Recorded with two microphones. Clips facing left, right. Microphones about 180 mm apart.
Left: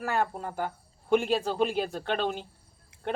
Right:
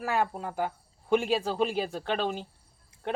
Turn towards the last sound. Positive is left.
turn(degrees=0)  # may be behind; listen again after turning